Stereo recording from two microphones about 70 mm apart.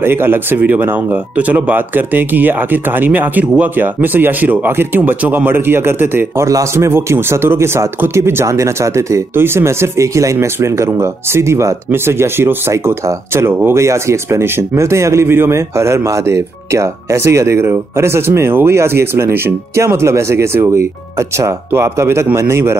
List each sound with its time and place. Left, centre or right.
0.0 s speech: right
6.4 s speech: right
9.3 s speech: right